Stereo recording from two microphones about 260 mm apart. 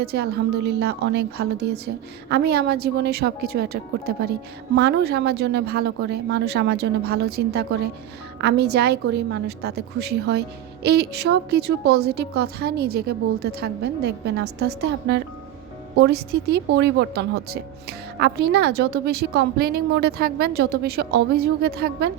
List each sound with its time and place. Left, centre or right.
0.0 s speech: right